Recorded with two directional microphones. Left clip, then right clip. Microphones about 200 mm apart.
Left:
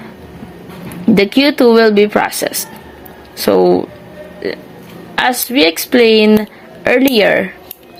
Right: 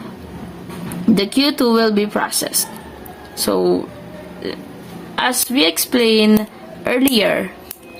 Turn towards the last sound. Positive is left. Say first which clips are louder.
# left 5 dB
turn(degrees=20)  # may be behind; listen again after turning